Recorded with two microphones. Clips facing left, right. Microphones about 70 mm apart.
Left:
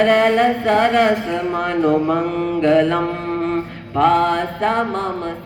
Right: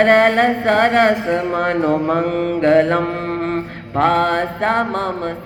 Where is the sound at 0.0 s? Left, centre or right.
Right.